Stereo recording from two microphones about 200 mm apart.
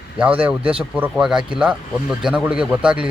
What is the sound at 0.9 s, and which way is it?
A man's voice, 5° right (ahead or behind).